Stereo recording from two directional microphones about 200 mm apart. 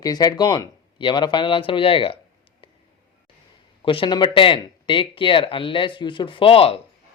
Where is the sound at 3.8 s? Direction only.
25° left (ahead or behind).